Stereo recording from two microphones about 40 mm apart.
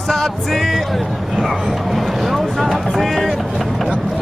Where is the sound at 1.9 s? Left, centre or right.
Centre.